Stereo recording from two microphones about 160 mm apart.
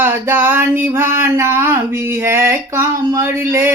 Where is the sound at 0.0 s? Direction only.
15° right (ahead or behind).